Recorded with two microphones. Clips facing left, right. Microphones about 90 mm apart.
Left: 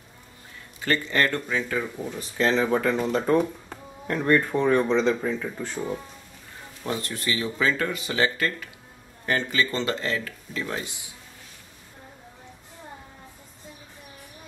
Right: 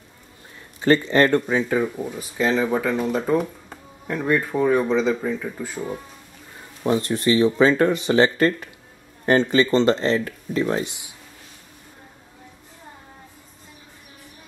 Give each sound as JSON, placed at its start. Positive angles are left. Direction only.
{"t": 0.7, "sound": "speech", "side_deg": -25}
{"t": 2.0, "sound": "speech", "side_deg": -10}
{"t": 6.8, "sound": "speech", "side_deg": -20}